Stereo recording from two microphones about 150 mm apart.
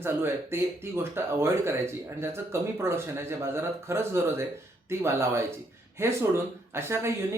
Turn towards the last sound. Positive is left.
turn(degrees=-15)  # may be behind; listen again after turning